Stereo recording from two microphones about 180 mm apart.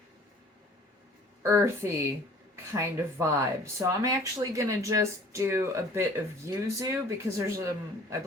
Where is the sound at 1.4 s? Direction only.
15° right (ahead or behind).